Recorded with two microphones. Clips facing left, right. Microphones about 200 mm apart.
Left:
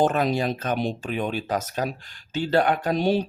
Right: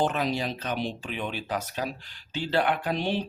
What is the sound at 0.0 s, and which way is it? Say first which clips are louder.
Speech: left 5 dB; 50° left (ahead or behind).